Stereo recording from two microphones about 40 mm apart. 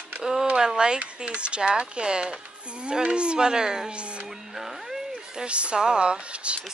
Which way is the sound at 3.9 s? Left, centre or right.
Right.